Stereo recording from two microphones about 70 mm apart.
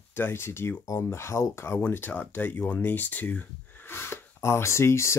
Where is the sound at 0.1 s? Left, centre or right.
Left.